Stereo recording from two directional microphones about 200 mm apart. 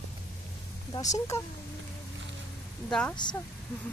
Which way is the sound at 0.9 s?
15° left (ahead or behind).